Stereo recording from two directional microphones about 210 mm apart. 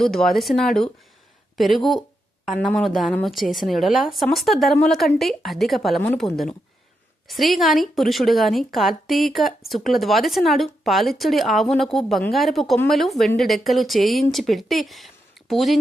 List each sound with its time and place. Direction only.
0.0 s speech: centre (ahead or behind)